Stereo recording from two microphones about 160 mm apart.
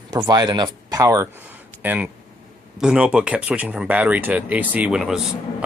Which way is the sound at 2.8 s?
5° right (ahead or behind).